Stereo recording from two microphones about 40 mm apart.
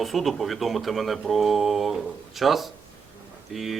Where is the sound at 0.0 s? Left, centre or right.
Centre.